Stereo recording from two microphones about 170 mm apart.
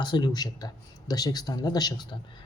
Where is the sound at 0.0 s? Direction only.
25° left (ahead or behind).